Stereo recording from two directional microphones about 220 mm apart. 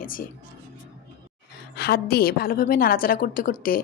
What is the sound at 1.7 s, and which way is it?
A woman's voice, 45° left (ahead or behind).